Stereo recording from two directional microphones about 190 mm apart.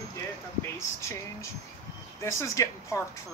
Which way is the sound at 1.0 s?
15° left (ahead or behind).